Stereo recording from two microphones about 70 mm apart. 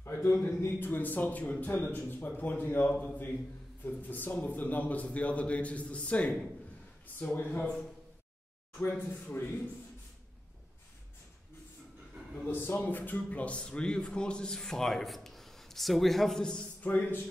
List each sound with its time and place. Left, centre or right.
0.0 s a man's voice: left
8.9 s a man's voice: left
12.4 s a man's voice: left; by 16.6 s centre
16.8 s a man's voice: left